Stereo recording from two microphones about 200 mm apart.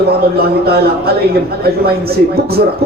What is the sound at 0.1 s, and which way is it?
Speech, 50° right (ahead or behind).